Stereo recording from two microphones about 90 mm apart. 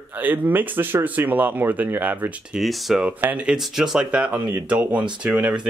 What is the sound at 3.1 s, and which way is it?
Speech, 15° right (ahead or behind).